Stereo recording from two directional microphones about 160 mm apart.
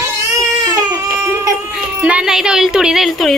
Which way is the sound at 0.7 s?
20° right (ahead or behind).